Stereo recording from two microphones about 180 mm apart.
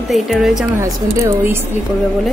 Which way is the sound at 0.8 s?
15° right (ahead or behind).